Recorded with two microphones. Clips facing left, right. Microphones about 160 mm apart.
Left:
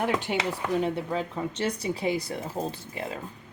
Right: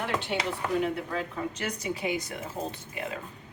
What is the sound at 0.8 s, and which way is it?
Speech, 30° left (ahead or behind).